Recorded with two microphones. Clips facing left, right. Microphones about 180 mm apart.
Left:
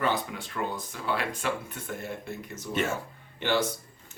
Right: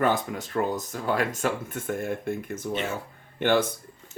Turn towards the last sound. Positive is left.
turn(degrees=-50)  # may be behind; listen again after turning